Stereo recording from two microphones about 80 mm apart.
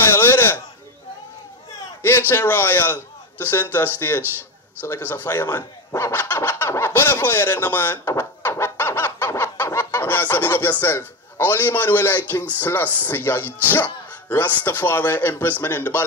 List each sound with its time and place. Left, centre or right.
0.2 s a sound: left
2.0 s a man's voice: left
5.9 s speech: left
8.2 s chicken: left
12.5 s speech: left